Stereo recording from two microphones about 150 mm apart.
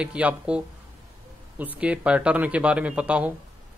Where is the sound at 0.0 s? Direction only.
10° right (ahead or behind).